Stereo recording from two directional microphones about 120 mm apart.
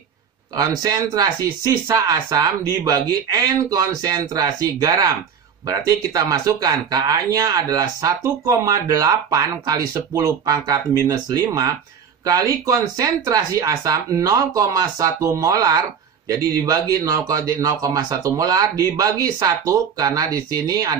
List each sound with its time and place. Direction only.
0.6 s speech: 30° right (ahead or behind)